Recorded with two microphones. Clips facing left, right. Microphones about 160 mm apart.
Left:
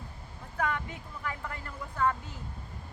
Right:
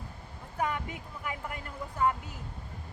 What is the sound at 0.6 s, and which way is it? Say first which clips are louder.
Speech: even; 15° right (ahead or behind).